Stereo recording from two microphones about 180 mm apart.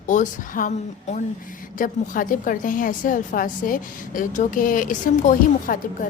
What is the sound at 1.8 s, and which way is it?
A woman's voice, 50° left (ahead or behind).